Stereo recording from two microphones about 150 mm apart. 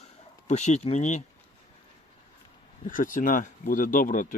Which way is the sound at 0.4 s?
50° left (ahead or behind).